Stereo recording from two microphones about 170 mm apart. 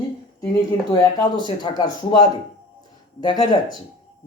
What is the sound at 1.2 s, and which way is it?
Speech, 25° left (ahead or behind).